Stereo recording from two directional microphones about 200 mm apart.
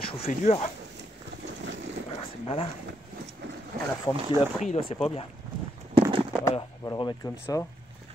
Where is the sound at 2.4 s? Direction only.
30° left (ahead or behind).